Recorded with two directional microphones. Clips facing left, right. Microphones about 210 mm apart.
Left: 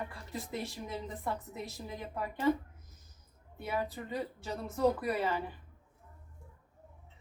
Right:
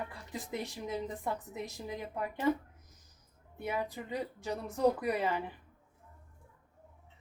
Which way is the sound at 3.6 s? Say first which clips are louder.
Even; 15° right (ahead or behind).